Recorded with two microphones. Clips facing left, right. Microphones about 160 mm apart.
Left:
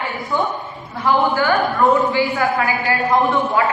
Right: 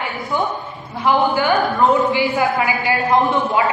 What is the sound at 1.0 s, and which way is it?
A man's voice, 20° right (ahead or behind).